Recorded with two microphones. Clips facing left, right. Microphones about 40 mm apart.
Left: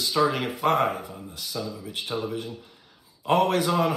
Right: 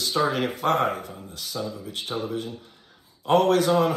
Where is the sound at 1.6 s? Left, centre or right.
Right.